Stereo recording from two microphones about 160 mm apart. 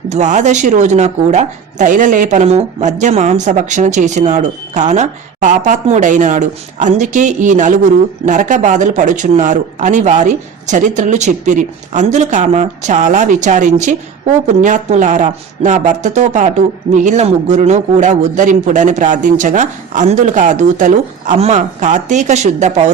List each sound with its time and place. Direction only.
0.1 s speech: 45° right (ahead or behind)